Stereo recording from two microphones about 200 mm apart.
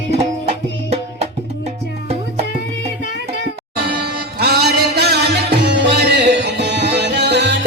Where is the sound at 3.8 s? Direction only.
55° right (ahead or behind).